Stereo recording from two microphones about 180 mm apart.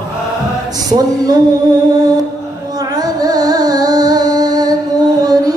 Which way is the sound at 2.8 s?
20° right (ahead or behind).